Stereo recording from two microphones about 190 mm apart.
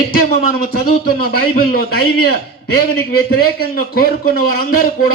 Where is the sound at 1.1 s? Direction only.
50° left (ahead or behind).